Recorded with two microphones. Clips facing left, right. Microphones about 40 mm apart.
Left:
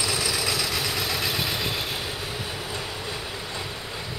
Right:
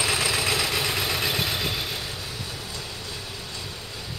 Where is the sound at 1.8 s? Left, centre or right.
Centre.